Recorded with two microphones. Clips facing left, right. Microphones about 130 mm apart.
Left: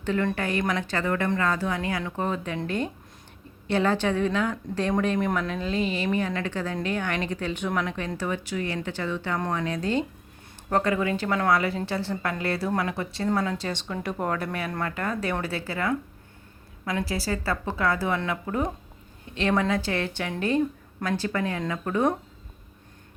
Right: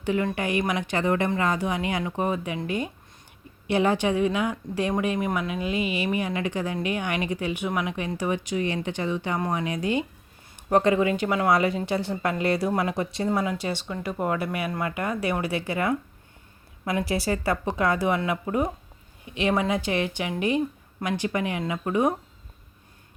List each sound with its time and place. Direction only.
0.0 s speech: 10° right (ahead or behind)